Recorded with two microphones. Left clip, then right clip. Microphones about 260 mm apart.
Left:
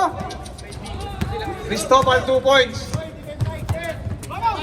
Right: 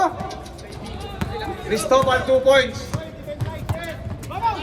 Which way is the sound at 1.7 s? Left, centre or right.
Centre.